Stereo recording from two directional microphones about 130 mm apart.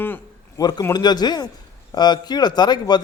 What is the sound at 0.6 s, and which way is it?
A man's voice, 30° left (ahead or behind).